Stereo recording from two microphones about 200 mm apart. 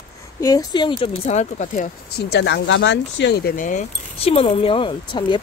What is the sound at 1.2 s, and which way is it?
Speech, 35° left (ahead or behind).